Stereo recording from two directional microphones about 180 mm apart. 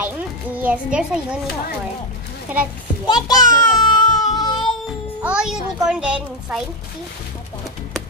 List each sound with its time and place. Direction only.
0.6 s a child's voice: 5° right (ahead or behind)
2.5 s speech: 10° right (ahead or behind)
3.1 s a sound: 20° left (ahead or behind)
5.2 s a child's voice: 5° right (ahead or behind)